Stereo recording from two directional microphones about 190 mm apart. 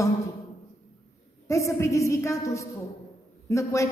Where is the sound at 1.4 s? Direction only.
15° left (ahead or behind).